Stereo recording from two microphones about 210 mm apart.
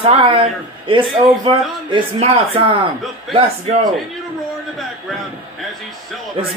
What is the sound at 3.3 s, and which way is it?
Speech, centre (ahead or behind).